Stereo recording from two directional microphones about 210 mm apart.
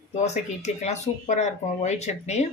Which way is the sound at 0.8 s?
30° left (ahead or behind).